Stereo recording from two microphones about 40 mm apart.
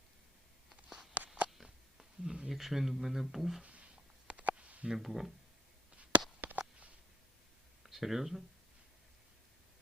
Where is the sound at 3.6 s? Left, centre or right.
Right.